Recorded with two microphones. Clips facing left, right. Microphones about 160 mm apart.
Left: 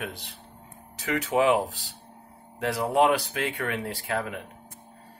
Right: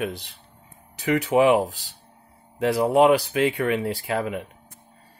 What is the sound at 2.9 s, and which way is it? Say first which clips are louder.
Speech: right 4 dB; 10° right (ahead or behind).